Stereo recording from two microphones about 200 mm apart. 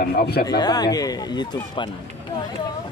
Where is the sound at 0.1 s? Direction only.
50° left (ahead or behind).